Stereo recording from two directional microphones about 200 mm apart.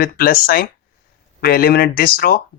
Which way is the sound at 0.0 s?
45° left (ahead or behind).